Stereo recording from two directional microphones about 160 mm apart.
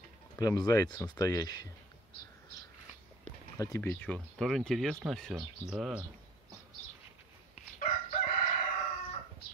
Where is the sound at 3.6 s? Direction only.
15° left (ahead or behind); by 6.0 s 5° right (ahead or behind).